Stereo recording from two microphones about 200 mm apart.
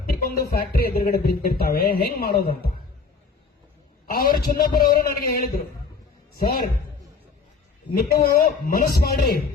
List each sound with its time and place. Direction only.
0.0 s speech: 45° left (ahead or behind)
4.0 s a man's voice: 45° left (ahead or behind)
7.9 s speech: 50° left (ahead or behind)